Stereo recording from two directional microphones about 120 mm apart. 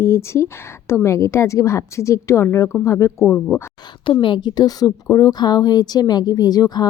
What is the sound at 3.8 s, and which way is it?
Speech, 45° left (ahead or behind).